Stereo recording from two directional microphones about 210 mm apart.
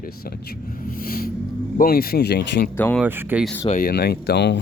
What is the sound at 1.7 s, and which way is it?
Speech, 45° left (ahead or behind).